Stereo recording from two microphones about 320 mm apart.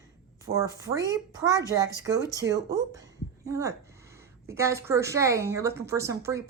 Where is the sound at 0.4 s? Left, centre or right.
Centre.